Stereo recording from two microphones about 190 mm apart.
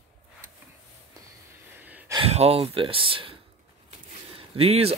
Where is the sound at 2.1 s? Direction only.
30° right (ahead or behind).